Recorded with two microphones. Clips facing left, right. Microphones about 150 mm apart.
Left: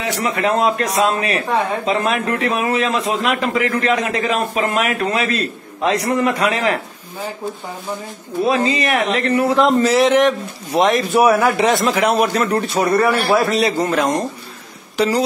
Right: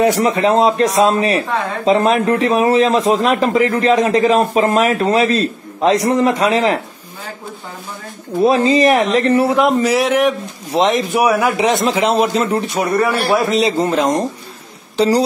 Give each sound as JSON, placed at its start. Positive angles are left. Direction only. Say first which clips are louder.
{"t": 0.4, "sound": "a man's voice", "louder": "right 2 dB", "side_deg": -30}
{"t": 8.4, "sound": "a man's voice", "louder": "right 5 dB", "side_deg": -40}
{"t": 9.5, "sound": "speech", "louder": "even", "side_deg": -10}
{"t": 10.7, "sound": "a man's voice", "louder": "even", "side_deg": -20}